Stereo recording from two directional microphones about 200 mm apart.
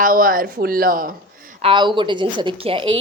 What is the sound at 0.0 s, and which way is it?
Speech, 45° right (ahead or behind).